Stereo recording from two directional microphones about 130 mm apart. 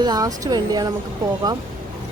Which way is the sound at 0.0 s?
30° right (ahead or behind).